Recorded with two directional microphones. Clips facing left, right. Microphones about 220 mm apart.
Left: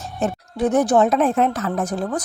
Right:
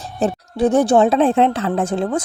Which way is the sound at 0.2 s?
30° right (ahead or behind).